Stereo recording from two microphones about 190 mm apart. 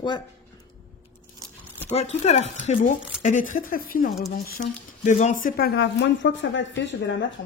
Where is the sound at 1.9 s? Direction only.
35° left (ahead or behind).